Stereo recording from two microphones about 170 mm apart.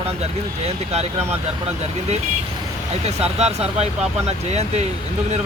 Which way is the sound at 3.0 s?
40° right (ahead or behind).